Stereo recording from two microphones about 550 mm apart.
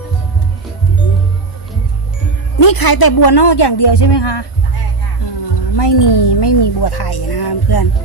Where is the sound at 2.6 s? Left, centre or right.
Left.